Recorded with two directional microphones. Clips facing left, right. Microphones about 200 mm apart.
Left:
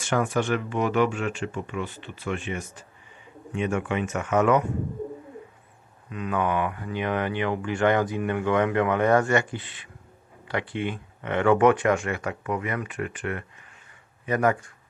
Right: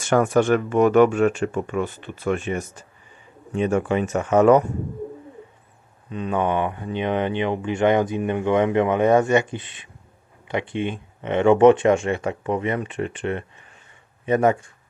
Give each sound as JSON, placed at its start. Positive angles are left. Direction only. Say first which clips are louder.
{"t": 0.1, "sound": "speech", "louder": "right 7 dB", "side_deg": -50}
{"t": 6.1, "sound": "speech", "louder": "right 3 dB", "side_deg": -30}